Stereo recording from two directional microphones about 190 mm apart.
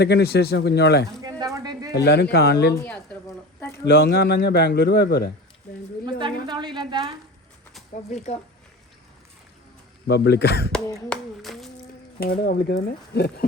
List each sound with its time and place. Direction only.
0.0 s speech: 60° left (ahead or behind)
1.4 s a sound: 20° right (ahead or behind)
1.9 s speech: 60° left (ahead or behind)
2.7 s speech: 10° left (ahead or behind)
3.8 s speech: 55° left (ahead or behind)
6.1 s a woman's voice: 25° right (ahead or behind)
8.1 s speech: 35° left (ahead or behind)
10.1 s speech: 60° left (ahead or behind)
11.1 s a sound: centre (ahead or behind)
12.2 s speech: 55° left (ahead or behind)